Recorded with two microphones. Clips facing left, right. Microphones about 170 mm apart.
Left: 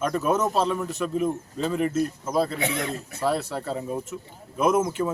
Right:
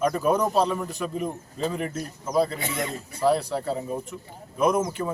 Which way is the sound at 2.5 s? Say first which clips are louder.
Left 4 dB; 65° left (ahead or behind).